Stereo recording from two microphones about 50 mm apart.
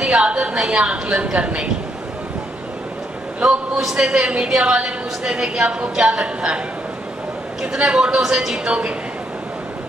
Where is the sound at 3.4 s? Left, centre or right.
Centre.